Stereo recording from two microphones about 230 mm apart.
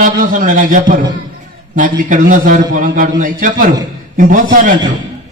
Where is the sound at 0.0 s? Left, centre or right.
Right.